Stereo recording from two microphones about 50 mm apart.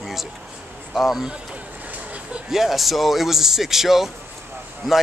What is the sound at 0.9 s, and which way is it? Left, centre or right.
Speech, centre.